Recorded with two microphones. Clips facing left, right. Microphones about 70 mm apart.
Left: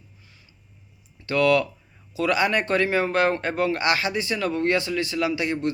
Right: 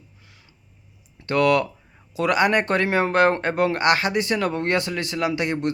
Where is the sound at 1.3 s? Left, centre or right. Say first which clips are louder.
Right 1 dB; right.